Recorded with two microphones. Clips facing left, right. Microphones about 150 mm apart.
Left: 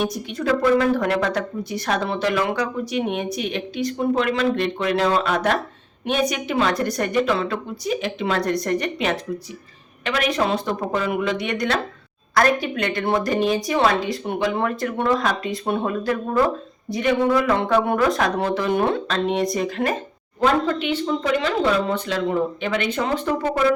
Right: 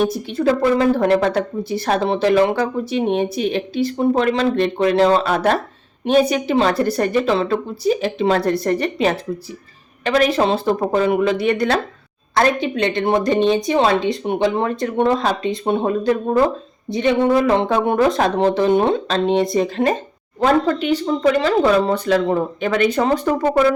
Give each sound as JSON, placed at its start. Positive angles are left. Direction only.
{"t": 0.1, "sound": "a woman's voice", "side_deg": -30}
{"t": 20.4, "sound": "a woman's voice", "side_deg": -40}